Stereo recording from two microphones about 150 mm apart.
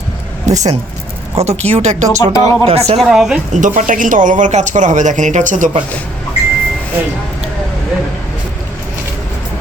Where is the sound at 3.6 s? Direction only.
60° right (ahead or behind).